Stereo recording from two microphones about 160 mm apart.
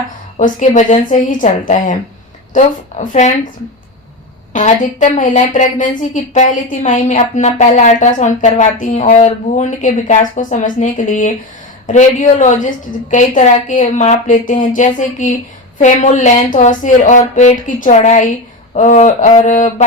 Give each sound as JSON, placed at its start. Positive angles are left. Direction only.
{"t": 0.6, "sound": "a woman's voice", "side_deg": 50}
{"t": 3.0, "sound": "a woman's voice", "side_deg": 50}
{"t": 4.5, "sound": "a woman's voice", "side_deg": 50}